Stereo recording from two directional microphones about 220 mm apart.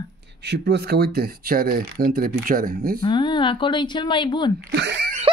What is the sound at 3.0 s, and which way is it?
Speech, 20° left (ahead or behind).